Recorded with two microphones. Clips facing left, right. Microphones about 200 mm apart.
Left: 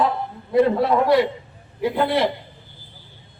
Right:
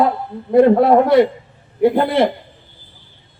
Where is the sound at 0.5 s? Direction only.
55° right (ahead or behind).